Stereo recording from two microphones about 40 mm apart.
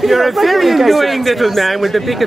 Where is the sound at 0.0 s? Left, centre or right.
Centre.